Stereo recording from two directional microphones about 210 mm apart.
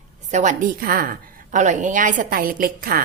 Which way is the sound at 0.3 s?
35° right (ahead or behind).